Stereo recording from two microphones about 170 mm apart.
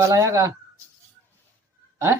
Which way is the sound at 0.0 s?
15° right (ahead or behind).